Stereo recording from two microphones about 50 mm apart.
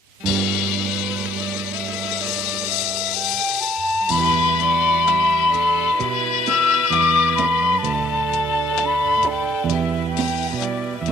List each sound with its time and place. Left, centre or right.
4.1 s music: centre
6.5 s music: centre; by 7.8 s right